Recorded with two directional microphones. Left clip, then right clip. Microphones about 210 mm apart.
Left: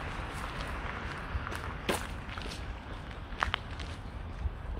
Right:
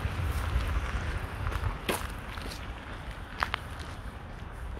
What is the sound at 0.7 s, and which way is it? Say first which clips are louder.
Vehicle: right 1 dB; 55° right (ahead or behind).